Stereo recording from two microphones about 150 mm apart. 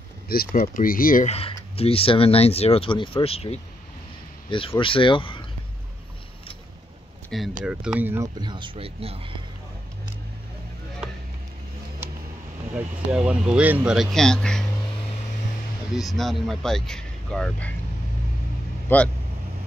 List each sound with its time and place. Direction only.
0.3 s speech: 90° left
0.7 s speech: 70° left (ahead or behind)
1.8 s speech: 40° left (ahead or behind)
7.2 s speech: centre (ahead or behind)
8.4 s speech: 30° right (ahead or behind)
13.1 s speech: 5° right (ahead or behind)
15.9 s speech: centre (ahead or behind)
18.9 s speech: 15° left (ahead or behind)